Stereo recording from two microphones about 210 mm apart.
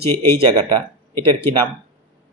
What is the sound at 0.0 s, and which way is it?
Speech, 10° left (ahead or behind).